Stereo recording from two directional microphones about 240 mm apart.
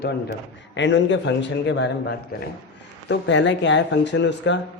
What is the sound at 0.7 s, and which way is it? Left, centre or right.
Speech, left.